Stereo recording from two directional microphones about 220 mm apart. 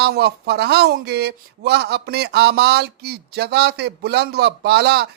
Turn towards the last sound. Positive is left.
turn(degrees=-50)  # may be behind; listen again after turning